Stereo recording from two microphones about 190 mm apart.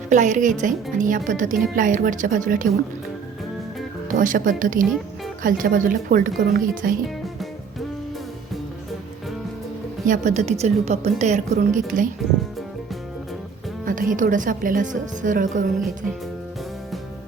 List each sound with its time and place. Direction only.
0.1 s a woman's voice: 40° right (ahead or behind)
4.1 s a woman's voice: 45° right (ahead or behind)
10.1 s a woman's voice: 40° right (ahead or behind)
13.8 s a woman's voice: 45° right (ahead or behind)